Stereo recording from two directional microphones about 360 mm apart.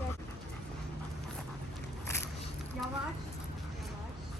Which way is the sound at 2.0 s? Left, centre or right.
Centre.